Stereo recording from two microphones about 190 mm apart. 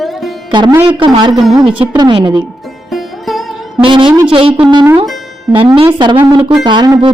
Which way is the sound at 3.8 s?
25° right (ahead or behind).